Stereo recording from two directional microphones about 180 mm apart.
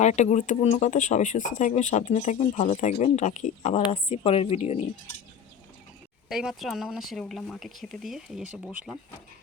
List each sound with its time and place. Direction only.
0.0 s speech: 40° left (ahead or behind)
6.2 s speech: centre (ahead or behind)